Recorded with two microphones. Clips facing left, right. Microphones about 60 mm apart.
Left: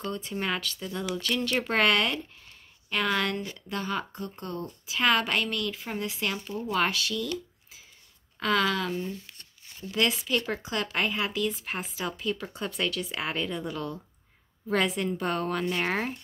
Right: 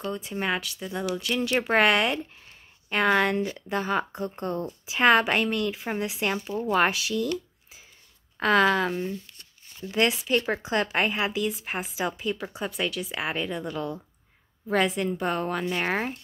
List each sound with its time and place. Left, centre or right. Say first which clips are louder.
0.0 s speech: right 2 dB; centre
8.4 s speech: right 5 dB; right
11.3 s speech: right 2 dB; centre